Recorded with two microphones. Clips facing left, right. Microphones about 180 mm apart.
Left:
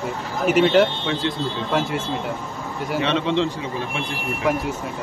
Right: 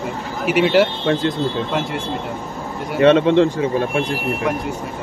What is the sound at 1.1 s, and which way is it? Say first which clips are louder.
Speech: right 7 dB; 55° right (ahead or behind).